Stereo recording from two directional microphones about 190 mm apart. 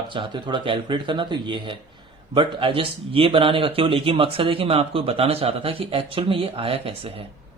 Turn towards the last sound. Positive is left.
turn(degrees=-30)  # may be behind; listen again after turning